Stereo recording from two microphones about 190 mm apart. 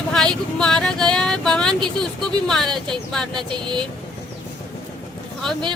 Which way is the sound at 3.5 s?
25° right (ahead or behind).